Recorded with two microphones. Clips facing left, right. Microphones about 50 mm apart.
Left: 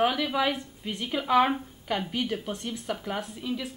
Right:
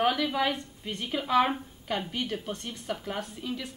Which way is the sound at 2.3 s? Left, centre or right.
Centre.